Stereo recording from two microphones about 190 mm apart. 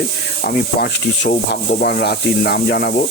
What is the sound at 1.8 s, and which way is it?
Speech, 60° left (ahead or behind).